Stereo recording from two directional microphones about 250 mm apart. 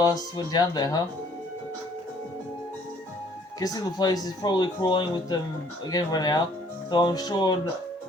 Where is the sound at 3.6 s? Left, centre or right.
Centre.